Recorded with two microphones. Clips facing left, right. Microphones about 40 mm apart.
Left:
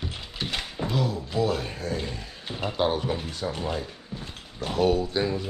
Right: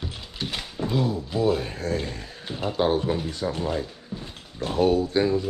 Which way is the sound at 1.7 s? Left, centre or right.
Right.